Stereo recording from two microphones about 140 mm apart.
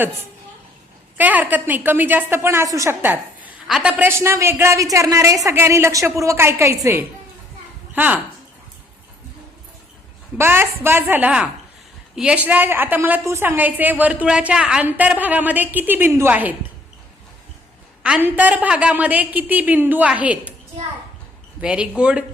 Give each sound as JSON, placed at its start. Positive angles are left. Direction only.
{"t": 1.1, "sound": "a woman's voice", "side_deg": -10}
{"t": 4.2, "sound": "a woman's voice", "side_deg": -20}
{"t": 10.3, "sound": "a woman's voice", "side_deg": -15}
{"t": 18.0, "sound": "a woman's voice", "side_deg": -10}
{"t": 21.6, "sound": "a woman's voice", "side_deg": -5}